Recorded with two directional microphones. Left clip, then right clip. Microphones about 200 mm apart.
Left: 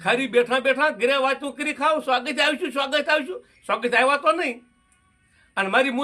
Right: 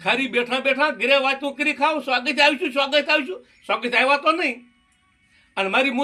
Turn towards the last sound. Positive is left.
turn(degrees=20)  # may be behind; listen again after turning